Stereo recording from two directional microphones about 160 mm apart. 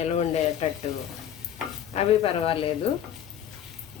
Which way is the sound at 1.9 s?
35° left (ahead or behind).